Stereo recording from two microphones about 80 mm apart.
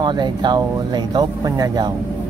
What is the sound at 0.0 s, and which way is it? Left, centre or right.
Speech, right.